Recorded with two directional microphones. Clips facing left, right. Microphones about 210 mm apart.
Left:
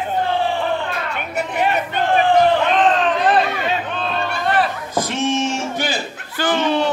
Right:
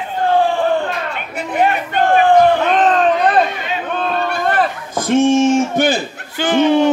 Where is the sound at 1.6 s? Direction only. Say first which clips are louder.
Right 5 dB; 50° right (ahead or behind).